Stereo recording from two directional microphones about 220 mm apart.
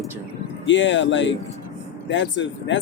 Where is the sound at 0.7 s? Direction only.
55° left (ahead or behind).